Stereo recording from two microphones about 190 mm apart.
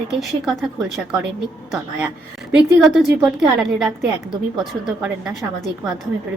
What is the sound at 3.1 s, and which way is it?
A woman's voice, 5° right (ahead or behind).